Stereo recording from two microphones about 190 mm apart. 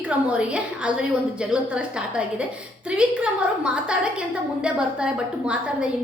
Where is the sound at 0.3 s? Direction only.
5° right (ahead or behind).